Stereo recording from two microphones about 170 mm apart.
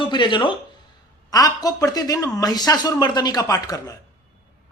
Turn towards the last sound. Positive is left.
turn(degrees=20)  # may be behind; listen again after turning